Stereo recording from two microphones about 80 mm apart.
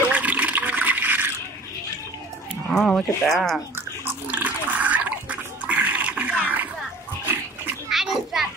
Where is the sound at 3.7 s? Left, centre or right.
Right.